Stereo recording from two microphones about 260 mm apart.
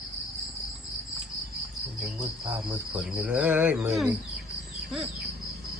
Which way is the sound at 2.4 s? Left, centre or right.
Centre.